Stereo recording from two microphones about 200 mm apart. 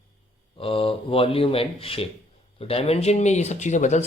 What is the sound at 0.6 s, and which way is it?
Speech, 25° left (ahead or behind).